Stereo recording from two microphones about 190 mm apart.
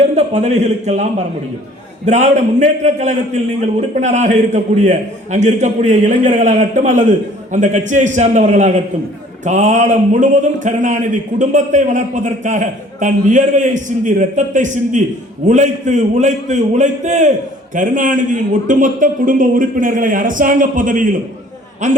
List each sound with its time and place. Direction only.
0.0 s a man's voice: 35° right (ahead or behind)
2.0 s a man's voice: 40° right (ahead or behind)